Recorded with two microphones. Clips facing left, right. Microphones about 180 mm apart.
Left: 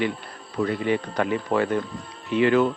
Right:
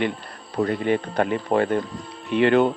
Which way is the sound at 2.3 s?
60° right (ahead or behind).